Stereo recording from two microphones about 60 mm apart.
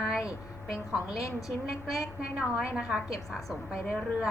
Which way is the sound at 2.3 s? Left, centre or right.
Centre.